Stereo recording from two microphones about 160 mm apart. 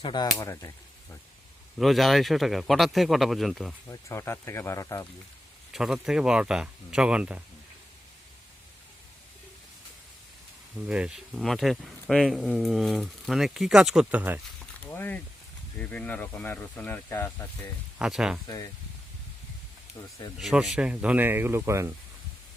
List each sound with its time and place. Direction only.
0.0 s speech: 25° left (ahead or behind)
1.8 s speech: centre (ahead or behind)
3.8 s speech: 15° left (ahead or behind)
5.7 s speech: 5° right (ahead or behind)
10.8 s speech: 5° right (ahead or behind)
14.8 s speech: 10° left (ahead or behind)
18.0 s speech: 5° right (ahead or behind)
18.4 s speech: 20° left (ahead or behind)
20.0 s speech: 20° left (ahead or behind)
20.4 s speech: centre (ahead or behind); by 21.9 s 15° right (ahead or behind)